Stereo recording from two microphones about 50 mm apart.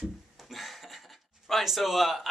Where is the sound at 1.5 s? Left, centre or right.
Centre.